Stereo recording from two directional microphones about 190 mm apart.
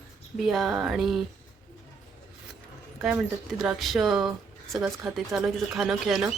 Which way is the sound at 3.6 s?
Centre (ahead or behind).